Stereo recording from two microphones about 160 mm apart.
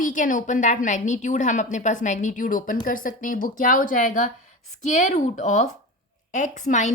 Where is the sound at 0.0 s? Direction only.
55° left (ahead or behind).